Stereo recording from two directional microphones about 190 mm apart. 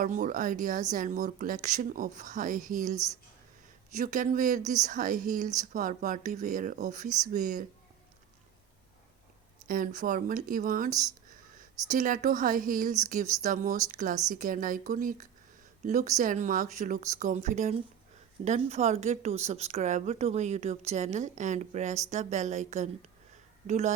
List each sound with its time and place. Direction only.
0.0 s a woman's voice: 45° right (ahead or behind)
3.9 s a woman's voice: 45° right (ahead or behind)
9.6 s a woman's voice: 50° right (ahead or behind)